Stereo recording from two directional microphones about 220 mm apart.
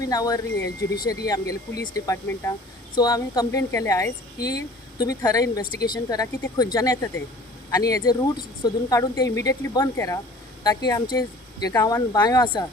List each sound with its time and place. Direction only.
0.1 s a woman's voice: 15° left (ahead or behind)